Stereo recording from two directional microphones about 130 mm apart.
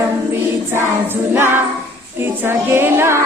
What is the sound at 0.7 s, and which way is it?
Speech, 15° right (ahead or behind).